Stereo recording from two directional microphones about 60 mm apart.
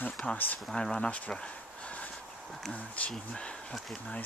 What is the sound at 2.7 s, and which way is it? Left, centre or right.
Speech, left.